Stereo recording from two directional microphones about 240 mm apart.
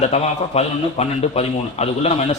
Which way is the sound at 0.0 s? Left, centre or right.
Left.